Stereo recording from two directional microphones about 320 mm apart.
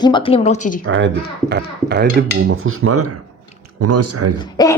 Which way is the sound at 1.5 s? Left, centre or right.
Right.